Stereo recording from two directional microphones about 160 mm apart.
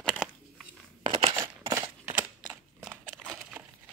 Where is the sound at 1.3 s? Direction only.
20° right (ahead or behind).